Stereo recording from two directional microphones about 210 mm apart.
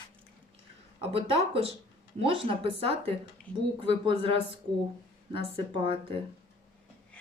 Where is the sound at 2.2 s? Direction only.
25° right (ahead or behind).